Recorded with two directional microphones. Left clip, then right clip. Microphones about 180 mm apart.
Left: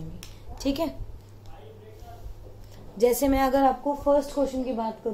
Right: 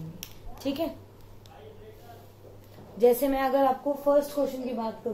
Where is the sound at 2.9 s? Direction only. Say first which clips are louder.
Left 1 dB; 55° left (ahead or behind).